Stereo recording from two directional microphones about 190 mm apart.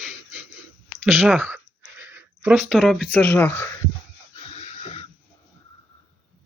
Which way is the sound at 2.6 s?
Centre (ahead or behind).